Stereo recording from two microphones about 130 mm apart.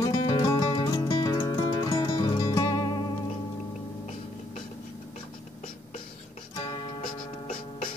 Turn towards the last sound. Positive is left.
turn(degrees=35)  # may be behind; listen again after turning